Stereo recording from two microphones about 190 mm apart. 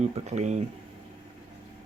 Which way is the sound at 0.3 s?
35° right (ahead or behind).